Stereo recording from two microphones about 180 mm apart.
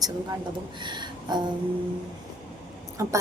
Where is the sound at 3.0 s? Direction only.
15° right (ahead or behind).